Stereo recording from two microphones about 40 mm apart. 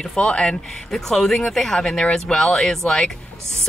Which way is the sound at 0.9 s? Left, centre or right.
Centre.